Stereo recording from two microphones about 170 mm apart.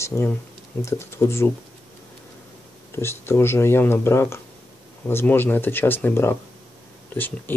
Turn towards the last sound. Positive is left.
turn(degrees=10)  # may be behind; listen again after turning